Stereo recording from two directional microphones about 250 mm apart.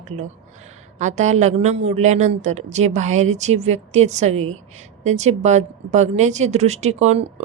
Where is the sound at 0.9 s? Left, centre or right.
Right.